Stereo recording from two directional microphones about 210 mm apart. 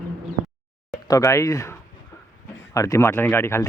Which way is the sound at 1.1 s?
15° left (ahead or behind).